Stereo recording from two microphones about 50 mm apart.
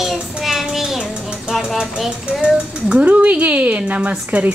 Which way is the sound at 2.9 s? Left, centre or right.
Right.